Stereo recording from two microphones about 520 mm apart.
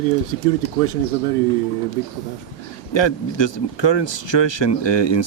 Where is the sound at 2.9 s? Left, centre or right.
Left.